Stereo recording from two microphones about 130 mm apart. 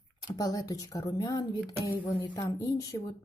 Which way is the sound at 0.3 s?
30° left (ahead or behind).